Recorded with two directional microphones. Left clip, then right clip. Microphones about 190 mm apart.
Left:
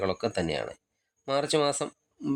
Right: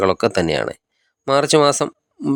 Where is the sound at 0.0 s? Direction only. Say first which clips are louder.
Right 12 dB; 40° right (ahead or behind).